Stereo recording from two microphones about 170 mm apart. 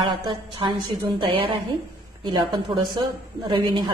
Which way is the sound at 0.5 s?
30° right (ahead or behind).